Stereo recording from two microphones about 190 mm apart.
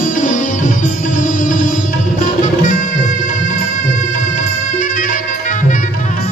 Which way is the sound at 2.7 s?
40° left (ahead or behind).